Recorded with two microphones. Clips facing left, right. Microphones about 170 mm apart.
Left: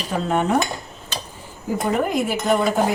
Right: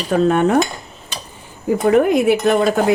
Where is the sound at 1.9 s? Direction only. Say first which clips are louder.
Right 9 dB; 65° right (ahead or behind).